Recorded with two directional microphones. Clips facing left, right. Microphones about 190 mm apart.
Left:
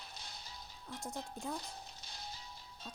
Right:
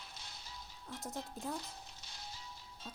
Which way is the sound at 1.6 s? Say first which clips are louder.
Left 2 dB; 35° left (ahead or behind).